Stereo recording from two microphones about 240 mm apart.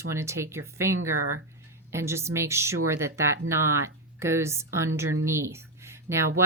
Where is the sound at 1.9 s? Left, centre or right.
Centre.